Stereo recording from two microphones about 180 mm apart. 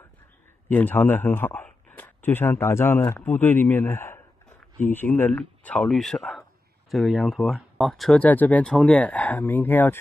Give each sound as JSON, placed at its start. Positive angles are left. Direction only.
{"t": 0.7, "sound": "a man's voice", "side_deg": 10}